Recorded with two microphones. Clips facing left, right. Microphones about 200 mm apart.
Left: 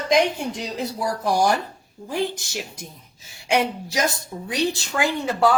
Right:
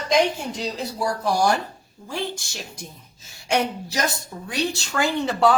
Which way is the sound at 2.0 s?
15° left (ahead or behind).